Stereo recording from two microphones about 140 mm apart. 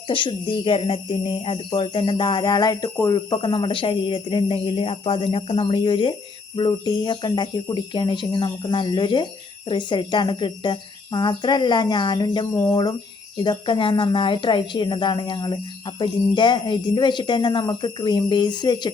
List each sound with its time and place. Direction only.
0.1 s speech: 35° left (ahead or behind)